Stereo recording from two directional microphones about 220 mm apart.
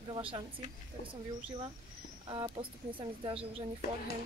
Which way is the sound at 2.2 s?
25° right (ahead or behind).